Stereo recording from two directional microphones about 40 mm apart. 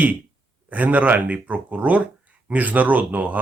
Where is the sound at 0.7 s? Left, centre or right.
Right.